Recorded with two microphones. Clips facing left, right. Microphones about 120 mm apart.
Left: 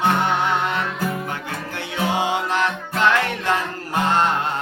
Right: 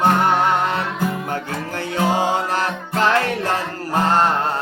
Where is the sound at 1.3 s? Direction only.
40° right (ahead or behind).